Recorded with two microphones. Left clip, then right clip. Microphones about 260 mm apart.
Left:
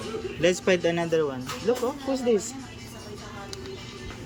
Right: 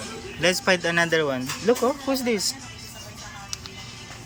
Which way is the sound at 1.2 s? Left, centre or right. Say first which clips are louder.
Right 3 dB; right.